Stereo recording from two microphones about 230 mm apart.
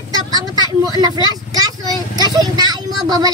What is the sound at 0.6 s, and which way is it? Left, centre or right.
A child's voice, centre.